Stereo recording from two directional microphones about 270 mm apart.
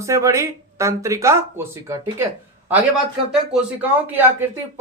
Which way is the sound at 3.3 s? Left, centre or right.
Centre.